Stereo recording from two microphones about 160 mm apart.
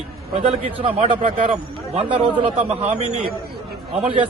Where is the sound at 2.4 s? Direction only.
40° right (ahead or behind).